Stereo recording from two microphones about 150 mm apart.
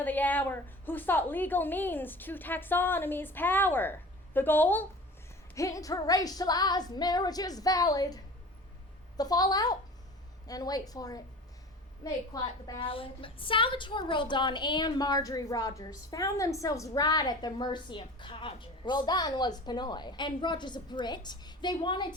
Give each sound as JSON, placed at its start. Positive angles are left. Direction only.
{"t": 0.0, "sound": "a woman's voice", "side_deg": 10}